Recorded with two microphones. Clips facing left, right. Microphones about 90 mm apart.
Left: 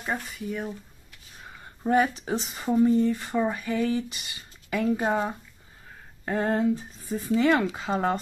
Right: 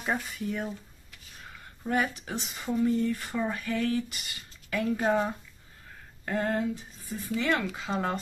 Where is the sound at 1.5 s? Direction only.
25° left (ahead or behind).